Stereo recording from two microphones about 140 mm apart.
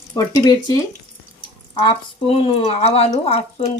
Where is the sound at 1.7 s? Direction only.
40° left (ahead or behind).